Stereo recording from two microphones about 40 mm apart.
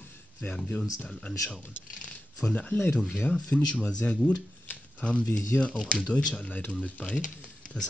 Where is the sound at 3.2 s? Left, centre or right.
Left.